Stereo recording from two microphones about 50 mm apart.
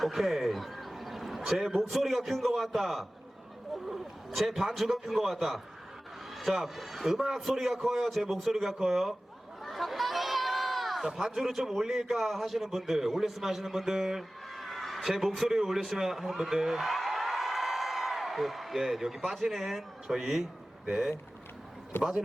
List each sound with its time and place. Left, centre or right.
0.0 s a man's voice: centre
4.4 s a man's voice: centre
9.6 s a sound: centre
11.3 s a man's voice: centre
21.9 s speech: left